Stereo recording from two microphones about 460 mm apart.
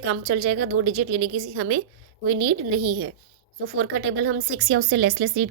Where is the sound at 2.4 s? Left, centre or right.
Right.